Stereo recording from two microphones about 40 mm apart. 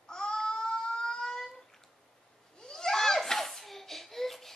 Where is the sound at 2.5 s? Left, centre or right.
Centre.